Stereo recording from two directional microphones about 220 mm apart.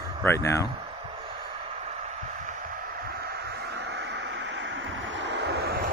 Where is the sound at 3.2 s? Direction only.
50° right (ahead or behind).